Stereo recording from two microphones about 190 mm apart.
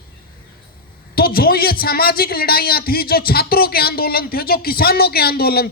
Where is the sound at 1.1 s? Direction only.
50° left (ahead or behind).